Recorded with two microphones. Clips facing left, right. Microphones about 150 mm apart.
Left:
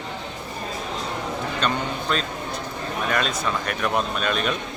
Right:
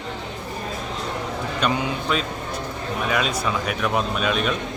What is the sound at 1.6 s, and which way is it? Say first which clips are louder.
A man's voice: right 3 dB; 5° right (ahead or behind).